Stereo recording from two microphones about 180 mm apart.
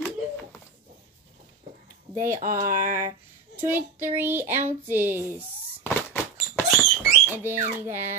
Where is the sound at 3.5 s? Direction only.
10° right (ahead or behind).